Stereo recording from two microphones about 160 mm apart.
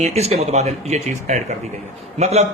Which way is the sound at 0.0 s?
40° right (ahead or behind).